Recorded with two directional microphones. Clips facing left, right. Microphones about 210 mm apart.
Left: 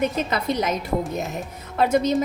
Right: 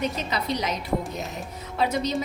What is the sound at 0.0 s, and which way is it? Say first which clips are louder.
A woman's voice: left 5 dB; 50° left (ahead or behind).